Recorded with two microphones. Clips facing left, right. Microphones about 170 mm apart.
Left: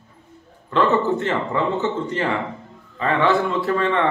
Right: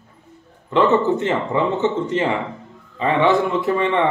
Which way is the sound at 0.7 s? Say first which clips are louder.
Right 3 dB; 20° right (ahead or behind).